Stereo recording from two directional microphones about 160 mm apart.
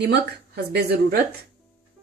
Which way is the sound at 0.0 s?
90° right.